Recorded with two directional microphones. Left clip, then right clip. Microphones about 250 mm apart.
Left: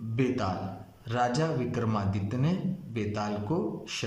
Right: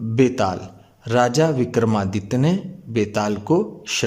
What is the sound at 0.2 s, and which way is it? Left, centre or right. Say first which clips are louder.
A man's voice: right 11 dB; right.